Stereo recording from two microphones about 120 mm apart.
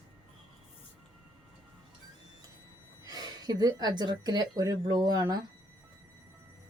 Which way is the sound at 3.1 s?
35° right (ahead or behind).